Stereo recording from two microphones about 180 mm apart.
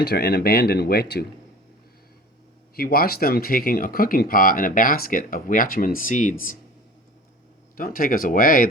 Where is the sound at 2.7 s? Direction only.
55° left (ahead or behind).